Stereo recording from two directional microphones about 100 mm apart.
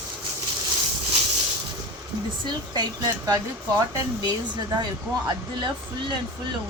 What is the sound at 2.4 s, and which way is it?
Speech, 45° right (ahead or behind).